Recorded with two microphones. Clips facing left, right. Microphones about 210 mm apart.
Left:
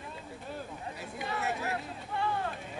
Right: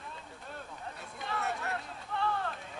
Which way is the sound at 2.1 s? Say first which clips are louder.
Left 1 dB; 10° left (ahead or behind).